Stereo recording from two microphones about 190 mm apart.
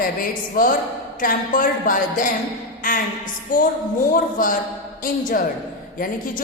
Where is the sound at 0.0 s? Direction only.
50° left (ahead or behind).